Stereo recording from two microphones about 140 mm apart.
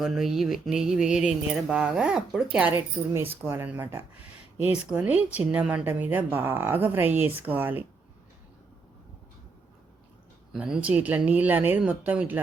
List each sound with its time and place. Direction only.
0.0 s a sound: 5° right (ahead or behind)
2.7 s a woman's voice: 20° right (ahead or behind)
10.5 s a woman's voice: 5° right (ahead or behind)